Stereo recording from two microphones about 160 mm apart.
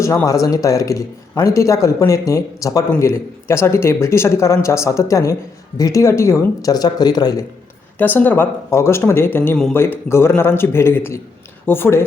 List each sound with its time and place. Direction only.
0.3 s a man's voice: 20° left (ahead or behind)
7.9 s speech: 10° left (ahead or behind)